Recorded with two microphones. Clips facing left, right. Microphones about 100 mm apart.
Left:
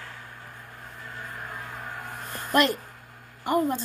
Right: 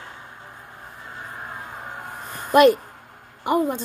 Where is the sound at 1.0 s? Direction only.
25° right (ahead or behind).